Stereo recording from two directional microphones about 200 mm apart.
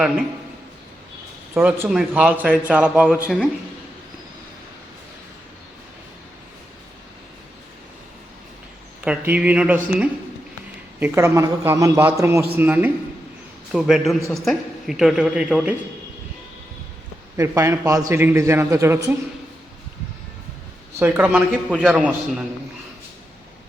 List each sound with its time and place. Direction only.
1.5 s a man's voice: 10° right (ahead or behind)
9.0 s a man's voice: 5° right (ahead or behind)
17.3 s a man's voice: 15° right (ahead or behind)
21.0 s a man's voice: 10° right (ahead or behind)